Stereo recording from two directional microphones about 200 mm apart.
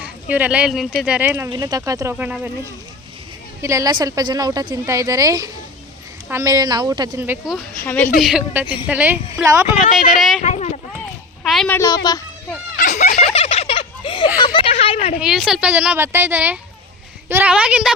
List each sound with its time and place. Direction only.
0.0 s speech: 10° right (ahead or behind)
1.5 s speech: 20° right (ahead or behind)
7.9 s a woman's voice: 10° left (ahead or behind)
8.2 s a woman's voice: 5° right (ahead or behind)
8.6 s speech: 25° left (ahead or behind)
8.9 s speech: 10° right (ahead or behind)
10.4 s speech: 35° left (ahead or behind)
11.4 s a woman's voice: centre (ahead or behind)
12.0 s children playing: 15° left (ahead or behind)
12.7 s a sound: 40° left (ahead or behind)
13.3 s turkey: 30° left (ahead or behind)
14.3 s speech: 25° left (ahead or behind)
15.2 s a woman's voice: 5° right (ahead or behind)